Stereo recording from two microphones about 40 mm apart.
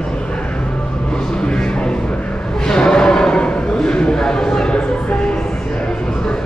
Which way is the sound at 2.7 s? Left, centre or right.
Centre.